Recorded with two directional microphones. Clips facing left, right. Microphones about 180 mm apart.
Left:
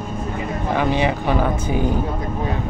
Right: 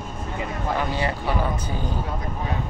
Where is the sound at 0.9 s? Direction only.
20° left (ahead or behind).